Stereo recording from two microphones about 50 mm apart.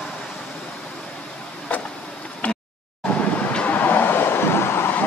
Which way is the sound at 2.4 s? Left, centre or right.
Left.